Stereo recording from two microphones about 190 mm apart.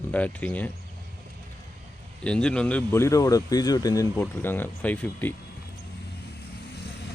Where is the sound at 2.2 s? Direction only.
5° left (ahead or behind).